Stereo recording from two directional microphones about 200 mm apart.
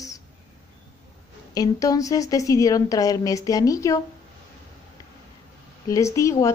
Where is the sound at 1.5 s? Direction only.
20° left (ahead or behind).